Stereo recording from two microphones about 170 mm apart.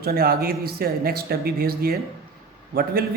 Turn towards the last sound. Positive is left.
turn(degrees=-65)  # may be behind; listen again after turning